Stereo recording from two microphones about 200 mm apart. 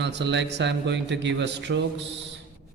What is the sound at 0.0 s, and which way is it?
Speech, 60° right (ahead or behind).